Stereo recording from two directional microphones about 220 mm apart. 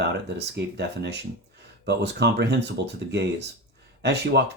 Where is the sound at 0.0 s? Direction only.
50° right (ahead or behind).